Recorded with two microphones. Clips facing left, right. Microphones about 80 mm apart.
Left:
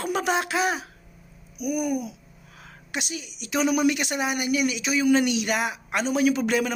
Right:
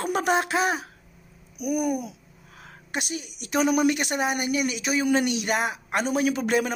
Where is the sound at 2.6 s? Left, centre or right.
Right.